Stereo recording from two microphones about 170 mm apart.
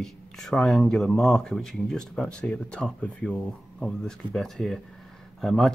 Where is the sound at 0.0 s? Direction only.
5° left (ahead or behind).